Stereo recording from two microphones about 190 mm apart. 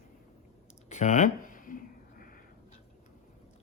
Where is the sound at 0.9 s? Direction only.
40° left (ahead or behind).